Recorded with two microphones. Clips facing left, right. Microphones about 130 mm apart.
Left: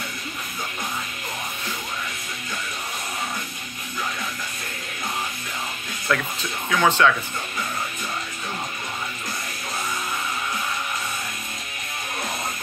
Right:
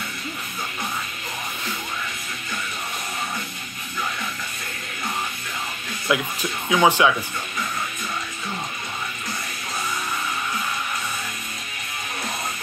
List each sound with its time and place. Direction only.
6.1 s speech: 15° right (ahead or behind)